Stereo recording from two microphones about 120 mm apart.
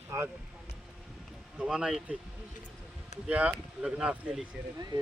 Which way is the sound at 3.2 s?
10° right (ahead or behind).